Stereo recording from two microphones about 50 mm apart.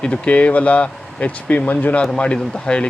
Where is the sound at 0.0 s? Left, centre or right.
Left.